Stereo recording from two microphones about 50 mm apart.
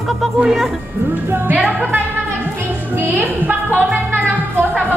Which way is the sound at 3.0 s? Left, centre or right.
Right.